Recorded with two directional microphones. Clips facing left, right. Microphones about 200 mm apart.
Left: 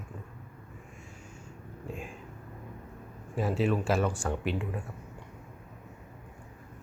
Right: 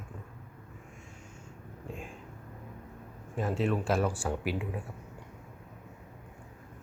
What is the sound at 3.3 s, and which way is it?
Speech, 5° left (ahead or behind).